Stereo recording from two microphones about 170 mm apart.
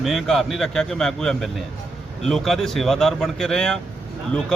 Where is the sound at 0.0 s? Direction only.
Centre (ahead or behind).